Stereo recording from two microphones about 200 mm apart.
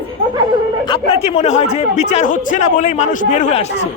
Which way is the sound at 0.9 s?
30° left (ahead or behind).